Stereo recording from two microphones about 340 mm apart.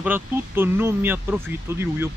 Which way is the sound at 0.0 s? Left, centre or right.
Centre.